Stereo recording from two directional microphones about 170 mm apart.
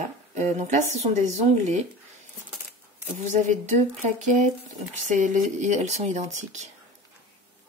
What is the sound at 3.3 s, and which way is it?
Speech, 45° right (ahead or behind).